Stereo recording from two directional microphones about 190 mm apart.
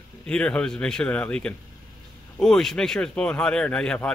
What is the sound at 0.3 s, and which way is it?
Speech, 5° left (ahead or behind).